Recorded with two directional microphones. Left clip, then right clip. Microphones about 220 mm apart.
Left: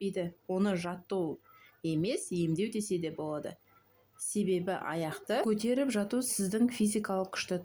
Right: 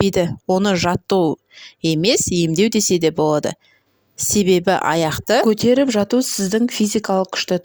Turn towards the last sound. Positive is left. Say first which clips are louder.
# right 15 dB
turn(degrees=-40)  # may be behind; listen again after turning